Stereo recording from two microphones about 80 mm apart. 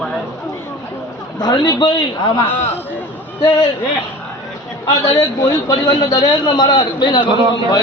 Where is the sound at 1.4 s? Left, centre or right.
Left.